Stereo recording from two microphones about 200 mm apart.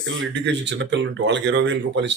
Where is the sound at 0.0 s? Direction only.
65° right (ahead or behind).